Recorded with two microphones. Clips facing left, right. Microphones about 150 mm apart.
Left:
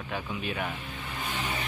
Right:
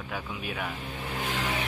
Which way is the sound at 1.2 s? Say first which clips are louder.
Right 2 dB; 90° right.